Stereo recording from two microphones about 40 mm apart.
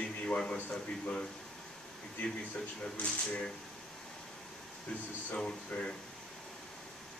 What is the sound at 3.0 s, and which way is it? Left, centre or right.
Speech, left.